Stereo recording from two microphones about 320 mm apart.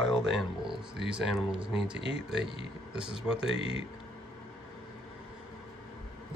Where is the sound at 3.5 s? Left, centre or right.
Centre.